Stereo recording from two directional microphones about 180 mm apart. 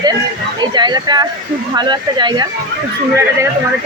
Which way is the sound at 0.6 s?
25° right (ahead or behind).